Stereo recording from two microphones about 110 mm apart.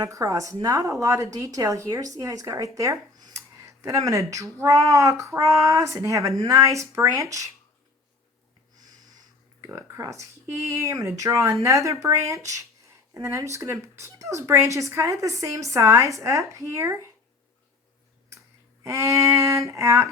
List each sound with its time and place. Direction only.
0.0 s speech: 30° right (ahead or behind)
9.7 s speech: 25° right (ahead or behind)
18.3 s speech: 25° right (ahead or behind)